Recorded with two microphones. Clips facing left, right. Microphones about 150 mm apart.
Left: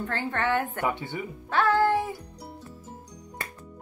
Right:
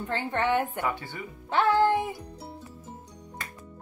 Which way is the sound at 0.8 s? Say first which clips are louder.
Left 2 dB; 20° left (ahead or behind).